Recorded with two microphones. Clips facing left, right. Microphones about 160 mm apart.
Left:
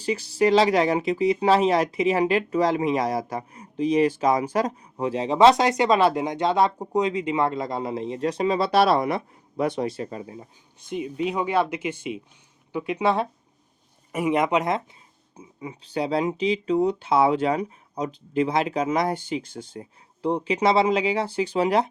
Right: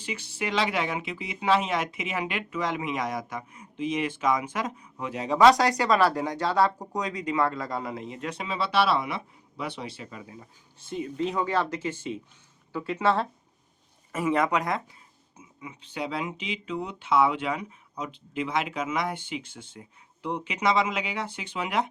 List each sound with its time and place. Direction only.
0.0 s speech: 35° left (ahead or behind)
10.8 s speech: 15° left (ahead or behind)
15.4 s speech: 35° left (ahead or behind)